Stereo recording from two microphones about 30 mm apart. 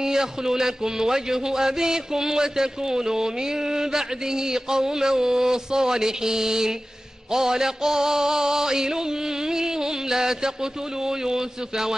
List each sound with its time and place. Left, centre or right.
0.0 s a man's voice: centre
7.3 s music: centre
9.5 s a sound: centre